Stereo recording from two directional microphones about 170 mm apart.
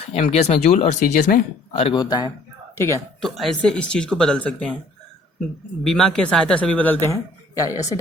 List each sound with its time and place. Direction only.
0.0 s speech: 35° left (ahead or behind)
1.8 s speech: 25° left (ahead or behind)
3.2 s speech: centre (ahead or behind)
5.8 s a man's voice: centre (ahead or behind); by 7.9 s 20° left (ahead or behind)